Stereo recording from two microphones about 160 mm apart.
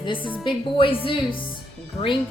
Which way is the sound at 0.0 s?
30° left (ahead or behind).